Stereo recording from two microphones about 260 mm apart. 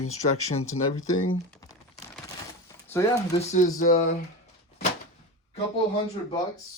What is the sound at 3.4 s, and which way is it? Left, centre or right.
Speech, left.